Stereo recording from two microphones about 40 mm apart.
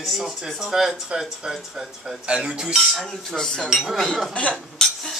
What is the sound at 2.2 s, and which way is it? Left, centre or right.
Speech, right.